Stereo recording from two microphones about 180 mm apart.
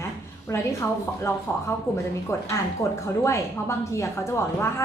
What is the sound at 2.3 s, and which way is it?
A woman's voice, 15° left (ahead or behind).